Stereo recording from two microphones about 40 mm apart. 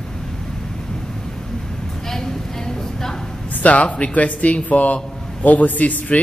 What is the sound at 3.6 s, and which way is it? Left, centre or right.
Speech, left.